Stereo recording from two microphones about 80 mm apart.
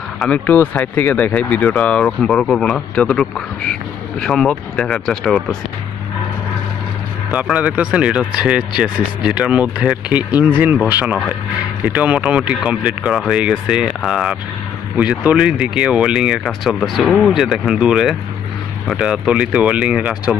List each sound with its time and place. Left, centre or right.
0.2 s a man's voice: centre
7.5 s speech: centre